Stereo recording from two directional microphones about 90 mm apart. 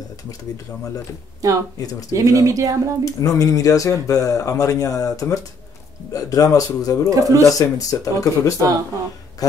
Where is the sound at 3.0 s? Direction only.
40° left (ahead or behind).